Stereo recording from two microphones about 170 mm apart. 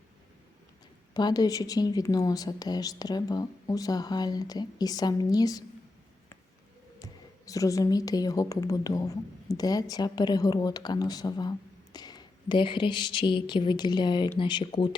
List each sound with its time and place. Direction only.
1.1 s a woman's voice: 25° left (ahead or behind)
7.0 s a woman's voice: 20° left (ahead or behind)